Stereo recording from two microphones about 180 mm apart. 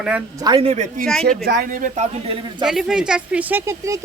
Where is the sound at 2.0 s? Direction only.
30° right (ahead or behind).